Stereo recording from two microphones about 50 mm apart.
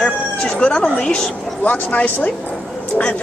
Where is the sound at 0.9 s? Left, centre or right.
Centre.